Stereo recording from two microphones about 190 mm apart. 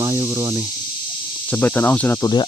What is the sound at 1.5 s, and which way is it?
Speech, 5° left (ahead or behind).